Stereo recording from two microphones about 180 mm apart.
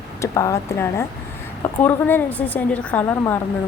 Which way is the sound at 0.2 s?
15° left (ahead or behind).